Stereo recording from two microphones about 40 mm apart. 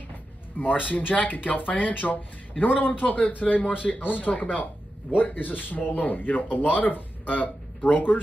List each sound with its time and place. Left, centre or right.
0.6 s speech: left